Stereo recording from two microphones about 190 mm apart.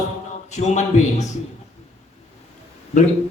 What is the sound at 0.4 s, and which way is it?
Speech, 35° left (ahead or behind).